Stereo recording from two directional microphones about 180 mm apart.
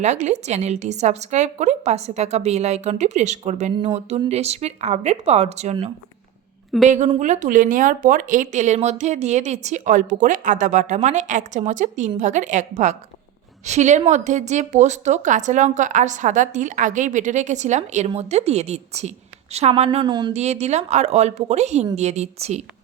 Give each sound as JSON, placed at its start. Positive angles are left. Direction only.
{"t": 0.0, "sound": "a woman's voice", "side_deg": -40}
{"t": 6.8, "sound": "a woman's voice", "side_deg": -40}
{"t": 20.3, "sound": "a woman's voice", "side_deg": -35}